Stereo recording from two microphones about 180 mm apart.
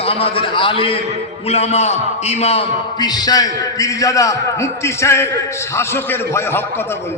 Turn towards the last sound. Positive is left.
turn(degrees=15)  # may be behind; listen again after turning